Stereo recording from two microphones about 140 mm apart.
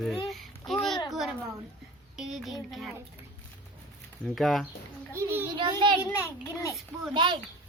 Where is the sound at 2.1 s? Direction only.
Centre (ahead or behind).